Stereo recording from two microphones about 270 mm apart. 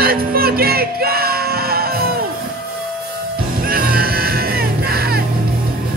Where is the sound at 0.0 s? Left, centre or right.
Right.